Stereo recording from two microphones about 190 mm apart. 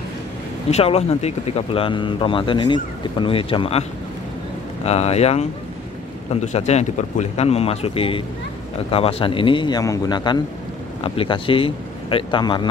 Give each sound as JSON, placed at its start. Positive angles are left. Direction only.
{"t": 0.7, "sound": "speech", "side_deg": 35}
{"t": 4.8, "sound": "speech", "side_deg": 35}